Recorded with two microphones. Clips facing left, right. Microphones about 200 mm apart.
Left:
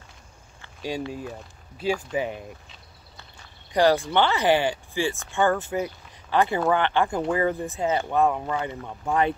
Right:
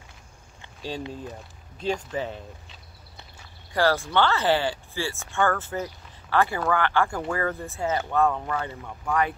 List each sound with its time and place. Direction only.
1.8 s speech: 10° left (ahead or behind)
3.7 s speech: 20° left (ahead or behind)